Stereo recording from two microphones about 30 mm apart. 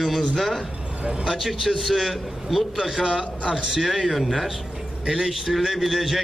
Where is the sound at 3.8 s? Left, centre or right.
Centre.